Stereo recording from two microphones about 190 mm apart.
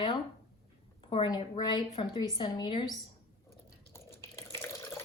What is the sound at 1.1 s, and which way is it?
A woman's voice, 25° left (ahead or behind).